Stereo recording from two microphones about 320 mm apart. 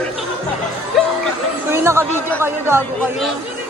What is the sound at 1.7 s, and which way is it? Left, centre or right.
Chatter, centre.